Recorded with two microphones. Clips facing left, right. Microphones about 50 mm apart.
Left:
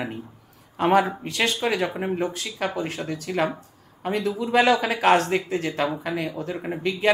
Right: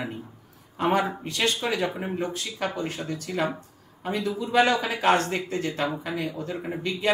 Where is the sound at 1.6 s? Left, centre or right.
Left.